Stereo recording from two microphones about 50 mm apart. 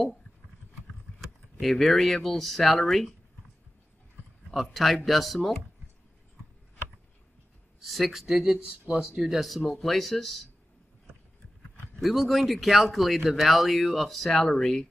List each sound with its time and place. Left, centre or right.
1.6 s speech: centre
4.6 s speech: centre
7.8 s speech: centre
8.3 s speech: centre
9.2 s speech: centre
12.0 s speech: centre
14.4 s speech: left